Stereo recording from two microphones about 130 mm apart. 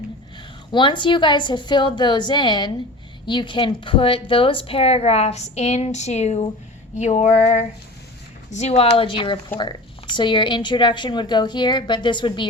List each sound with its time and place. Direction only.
0.7 s a woman's voice: 40° left (ahead or behind); by 6.5 s 60° left (ahead or behind)
6.9 s a sound: 65° left (ahead or behind)
8.4 s a woman's voice: 60° left (ahead or behind); by 12.5 s 35° left (ahead or behind)